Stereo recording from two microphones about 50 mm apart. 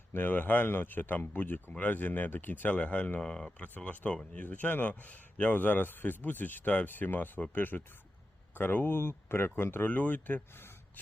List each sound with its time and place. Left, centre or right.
0.1 s a man's voice: left
3.2 s speech: centre
3.6 s speech: left
4.1 s speech: centre
4.4 s a man's voice: left
11.0 s gasp: left